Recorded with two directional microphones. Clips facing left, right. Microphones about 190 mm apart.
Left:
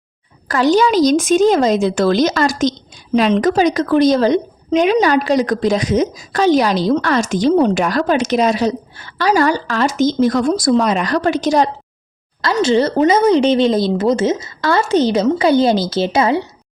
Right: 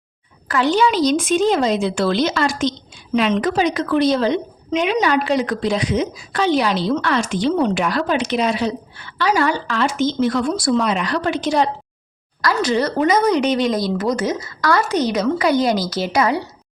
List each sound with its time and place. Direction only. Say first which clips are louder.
0.4 s a woman's voice: left 4 dB; 40° left (ahead or behind)
12.4 s speech: left 4 dB; 25° left (ahead or behind)